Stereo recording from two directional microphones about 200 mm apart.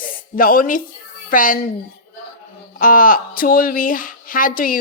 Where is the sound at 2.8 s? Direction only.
45° left (ahead or behind).